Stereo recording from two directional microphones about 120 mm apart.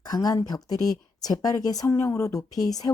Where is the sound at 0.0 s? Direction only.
35° left (ahead or behind).